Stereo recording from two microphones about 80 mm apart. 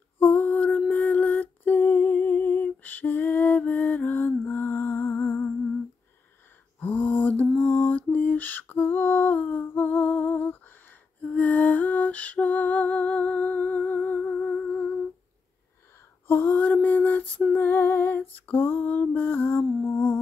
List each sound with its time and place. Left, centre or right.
0.2 s lullaby: left
6.8 s lullaby: left
16.3 s female singing: left
17.5 s music: left
18.5 s lullaby: left